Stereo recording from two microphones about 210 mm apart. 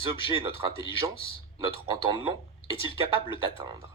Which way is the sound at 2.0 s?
25° right (ahead or behind).